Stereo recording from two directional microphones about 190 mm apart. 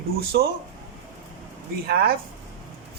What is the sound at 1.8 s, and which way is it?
Speech, 55° right (ahead or behind).